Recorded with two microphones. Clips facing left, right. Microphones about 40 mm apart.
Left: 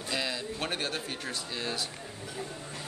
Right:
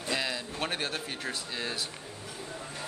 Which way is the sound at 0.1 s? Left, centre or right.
Centre.